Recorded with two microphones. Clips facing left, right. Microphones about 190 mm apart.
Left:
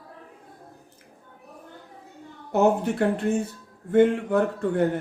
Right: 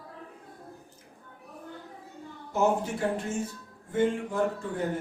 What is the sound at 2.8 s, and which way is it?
Speech, 65° left (ahead or behind).